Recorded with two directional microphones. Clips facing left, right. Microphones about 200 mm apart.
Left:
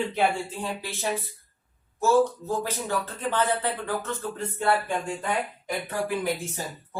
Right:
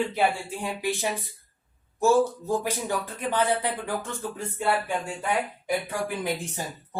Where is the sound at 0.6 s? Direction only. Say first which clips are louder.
Right 3 dB; 15° right (ahead or behind).